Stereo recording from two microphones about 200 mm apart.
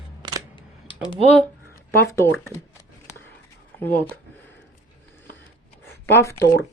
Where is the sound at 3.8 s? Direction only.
10° left (ahead or behind).